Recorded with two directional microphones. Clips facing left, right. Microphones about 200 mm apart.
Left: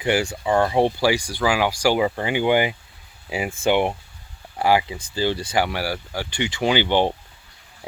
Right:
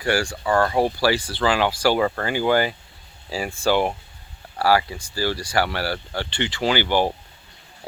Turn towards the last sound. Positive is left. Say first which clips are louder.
# left 1 dB
turn(degrees=20)  # may be behind; listen again after turning